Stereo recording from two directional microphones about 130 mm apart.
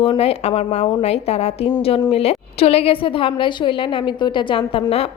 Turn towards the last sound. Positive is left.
turn(degrees=40)  # may be behind; listen again after turning